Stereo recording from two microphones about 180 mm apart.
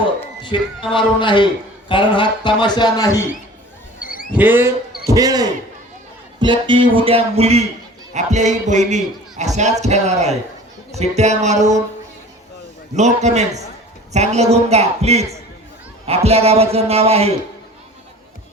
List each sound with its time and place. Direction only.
0.4 s speech: 25° left (ahead or behind)
4.0 s a sound: 50° left (ahead or behind)
4.4 s a man's voice: 10° right (ahead or behind); by 11.8 s 40° right (ahead or behind)
12.9 s a man's voice: 40° right (ahead or behind)